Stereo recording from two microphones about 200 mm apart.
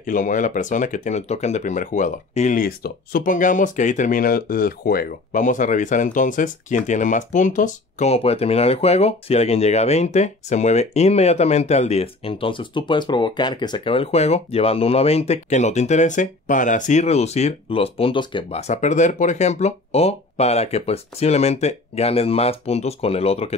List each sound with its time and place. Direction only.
0.0 s speech: 40° left (ahead or behind)